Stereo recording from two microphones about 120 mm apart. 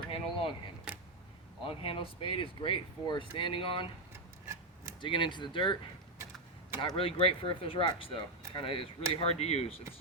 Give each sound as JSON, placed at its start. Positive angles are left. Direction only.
{"t": 0.1, "sound": "a sound", "side_deg": 50}
{"t": 1.6, "sound": "speech", "side_deg": 50}
{"t": 4.4, "sound": "rub", "side_deg": -25}
{"t": 4.9, "sound": "speech", "side_deg": 45}
{"t": 6.7, "sound": "speech", "side_deg": 50}